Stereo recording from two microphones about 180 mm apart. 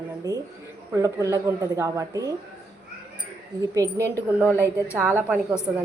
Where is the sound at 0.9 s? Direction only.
20° right (ahead or behind).